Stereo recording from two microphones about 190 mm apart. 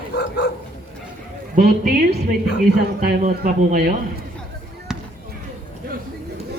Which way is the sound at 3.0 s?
45° right (ahead or behind).